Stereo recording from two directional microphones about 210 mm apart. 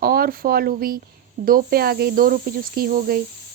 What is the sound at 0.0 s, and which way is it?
Speech, 45° right (ahead or behind).